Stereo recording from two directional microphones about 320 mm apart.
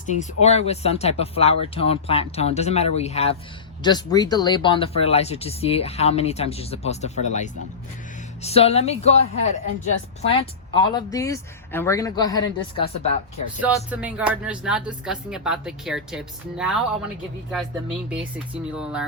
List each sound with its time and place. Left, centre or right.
0.1 s speech: left
13.6 s speech: centre
18.1 s speech: centre